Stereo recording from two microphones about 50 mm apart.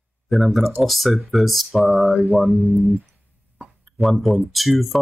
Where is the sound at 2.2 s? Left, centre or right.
Centre.